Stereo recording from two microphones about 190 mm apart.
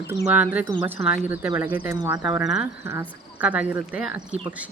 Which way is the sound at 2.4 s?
5° right (ahead or behind).